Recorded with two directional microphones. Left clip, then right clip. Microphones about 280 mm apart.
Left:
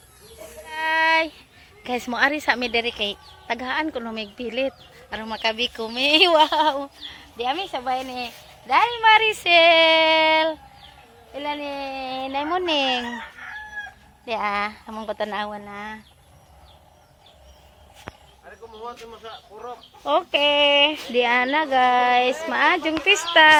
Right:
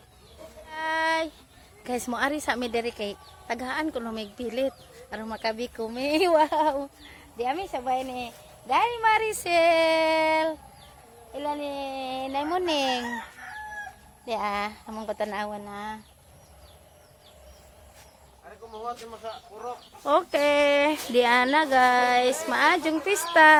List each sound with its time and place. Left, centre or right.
0.7 s music: centre
1.8 s a woman's voice: centre
14.3 s a woman's voice: centre
18.8 s speech: right
20.1 s speech: centre